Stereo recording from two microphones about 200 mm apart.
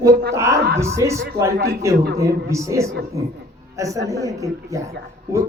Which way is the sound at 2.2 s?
15° right (ahead or behind).